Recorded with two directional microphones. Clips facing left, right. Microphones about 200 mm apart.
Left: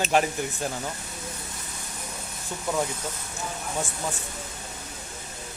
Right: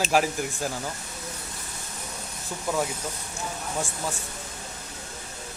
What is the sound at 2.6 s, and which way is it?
Speech, centre (ahead or behind).